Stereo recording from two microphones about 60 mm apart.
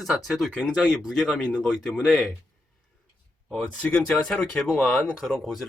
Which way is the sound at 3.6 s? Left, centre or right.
Left.